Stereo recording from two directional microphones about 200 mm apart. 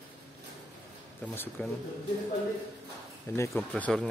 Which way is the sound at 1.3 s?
10° left (ahead or behind).